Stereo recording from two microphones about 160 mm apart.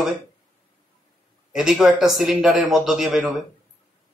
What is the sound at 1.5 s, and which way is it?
Speech, 5° right (ahead or behind).